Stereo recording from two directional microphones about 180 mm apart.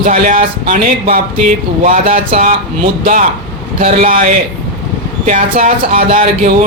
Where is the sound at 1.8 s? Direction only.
45° right (ahead or behind).